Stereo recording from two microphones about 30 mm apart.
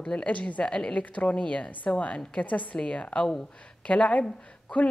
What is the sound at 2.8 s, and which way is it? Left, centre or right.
Speech, left.